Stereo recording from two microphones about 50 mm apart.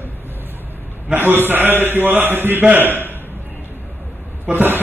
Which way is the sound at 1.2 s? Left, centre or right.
Right.